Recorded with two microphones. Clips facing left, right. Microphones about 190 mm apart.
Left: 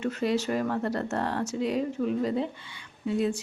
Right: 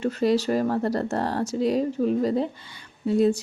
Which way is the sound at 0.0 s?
35° right (ahead or behind).